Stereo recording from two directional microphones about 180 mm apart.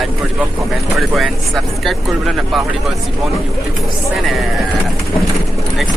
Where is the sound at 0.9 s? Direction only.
Centre (ahead or behind).